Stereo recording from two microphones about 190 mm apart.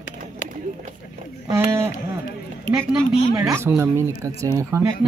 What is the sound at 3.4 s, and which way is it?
A woman's voice, 15° right (ahead or behind).